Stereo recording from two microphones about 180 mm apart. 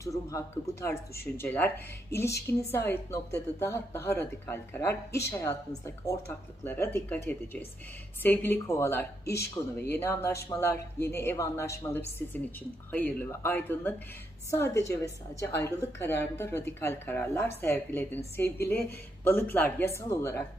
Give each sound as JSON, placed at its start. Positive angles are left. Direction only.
{"t": 0.0, "sound": "speech", "side_deg": 15}